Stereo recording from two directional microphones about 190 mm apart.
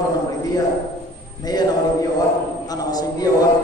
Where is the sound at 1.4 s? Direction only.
20° left (ahead or behind).